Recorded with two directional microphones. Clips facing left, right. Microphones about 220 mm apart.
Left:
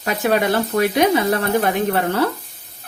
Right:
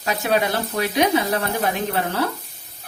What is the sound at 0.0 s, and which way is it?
Speech, 55° left (ahead or behind).